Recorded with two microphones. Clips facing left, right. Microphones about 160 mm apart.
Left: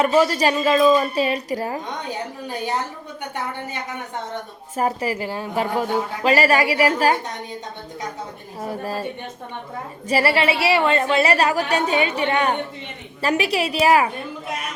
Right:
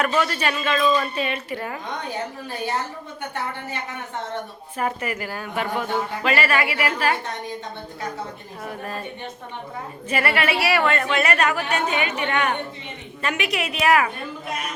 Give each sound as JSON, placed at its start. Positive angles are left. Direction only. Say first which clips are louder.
{"t": 0.0, "sound": "a woman's voice", "louder": "left 5 dB", "side_deg": 30}
{"t": 2.0, "sound": "a woman's voice", "louder": "left 1 dB", "side_deg": 15}
{"t": 4.8, "sound": "a woman's voice", "louder": "left 4 dB", "side_deg": 35}
{"t": 8.6, "sound": "a woman's voice", "louder": "left 5 dB", "side_deg": 35}
{"t": 10.1, "sound": "a woman's voice", "louder": "left 4 dB", "side_deg": 30}